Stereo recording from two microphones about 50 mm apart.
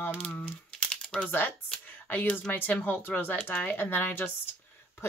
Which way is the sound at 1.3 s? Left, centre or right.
Left.